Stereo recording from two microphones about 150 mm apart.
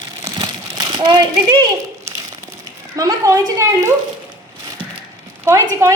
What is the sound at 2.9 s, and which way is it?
Speech, 20° right (ahead or behind).